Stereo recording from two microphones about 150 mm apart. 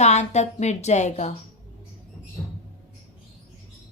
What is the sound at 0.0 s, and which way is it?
A woman's voice, 50° left (ahead or behind).